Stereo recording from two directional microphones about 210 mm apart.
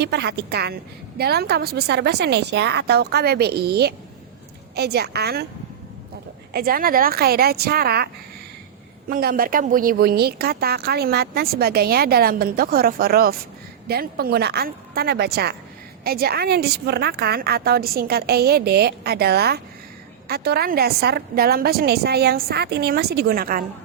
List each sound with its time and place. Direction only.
0.0 s speech: 50° right (ahead or behind)
6.5 s speech: 45° right (ahead or behind)